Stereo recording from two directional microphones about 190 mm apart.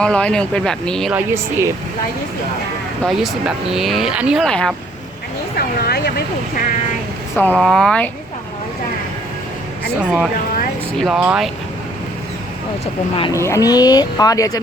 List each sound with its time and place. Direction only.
0.0 s speech: 5° left (ahead or behind)
1.1 s speech: 10° right (ahead or behind)
3.0 s speech: centre (ahead or behind)
5.5 s speech: 55° left (ahead or behind)
7.3 s speech: 10° left (ahead or behind)
10.0 s speech: 5° right (ahead or behind)
12.8 s speech: 30° left (ahead or behind)
13.3 s speech: 15° left (ahead or behind)